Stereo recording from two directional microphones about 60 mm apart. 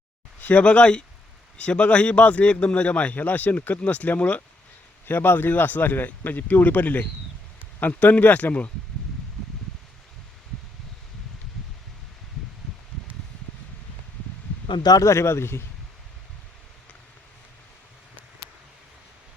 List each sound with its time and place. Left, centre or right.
0.4 s speech: left
14.8 s speech: left
15.1 s a man's voice: left